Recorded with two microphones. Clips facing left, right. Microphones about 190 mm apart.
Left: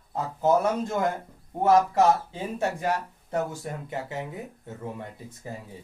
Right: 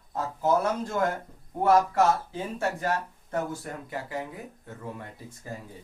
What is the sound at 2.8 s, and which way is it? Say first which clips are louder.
Speech: left 1 dB; 15° left (ahead or behind).